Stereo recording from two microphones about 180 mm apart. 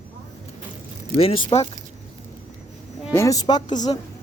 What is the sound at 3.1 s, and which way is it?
Speech, 15° left (ahead or behind).